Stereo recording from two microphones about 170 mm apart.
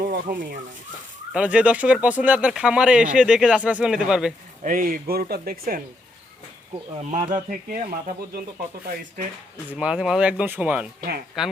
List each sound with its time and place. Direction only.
0.0 s speech: 55° right (ahead or behind)
1.3 s speech: 5° right (ahead or behind)
4.6 s speech: 55° right (ahead or behind)
7.3 s speech: 50° right (ahead or behind)
9.7 s speech: 5° right (ahead or behind)